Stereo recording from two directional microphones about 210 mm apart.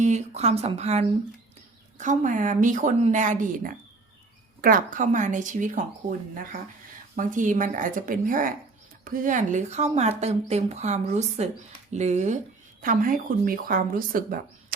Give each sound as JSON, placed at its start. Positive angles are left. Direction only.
{"t": 0.0, "sound": "speech", "side_deg": -35}